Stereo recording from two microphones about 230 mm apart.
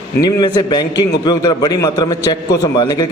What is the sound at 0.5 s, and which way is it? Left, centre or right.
A man's voice, centre.